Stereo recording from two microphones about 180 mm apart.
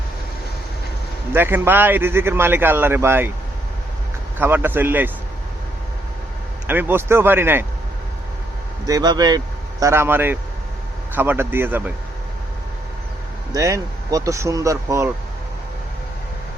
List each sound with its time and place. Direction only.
1.3 s a man's voice: 10° right (ahead or behind)
4.4 s a man's voice: 10° right (ahead or behind)
6.7 s a man's voice: 10° right (ahead or behind)
8.9 s a man's voice: 20° right (ahead or behind)
13.5 s a man's voice: 20° right (ahead or behind)